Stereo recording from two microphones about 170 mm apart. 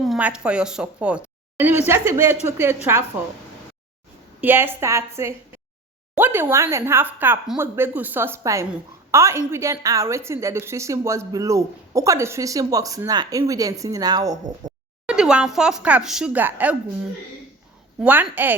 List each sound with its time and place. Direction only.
0.0 s a woman's voice: 5° right (ahead or behind)
4.4 s a woman's voice: 10° right (ahead or behind)
15.0 s speech: 5° right (ahead or behind)
18.0 s speech: 10° right (ahead or behind)